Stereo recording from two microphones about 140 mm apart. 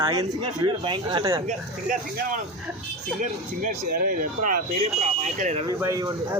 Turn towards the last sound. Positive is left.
turn(degrees=-25)  # may be behind; listen again after turning